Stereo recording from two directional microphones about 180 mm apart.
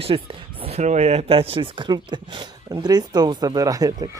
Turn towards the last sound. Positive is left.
turn(degrees=-20)  # may be behind; listen again after turning